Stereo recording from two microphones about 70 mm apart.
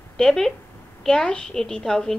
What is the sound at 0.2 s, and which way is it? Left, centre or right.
A woman's voice, centre.